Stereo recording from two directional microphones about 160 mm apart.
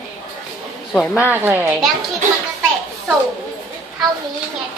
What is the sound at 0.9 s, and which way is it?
Speech, 10° right (ahead or behind).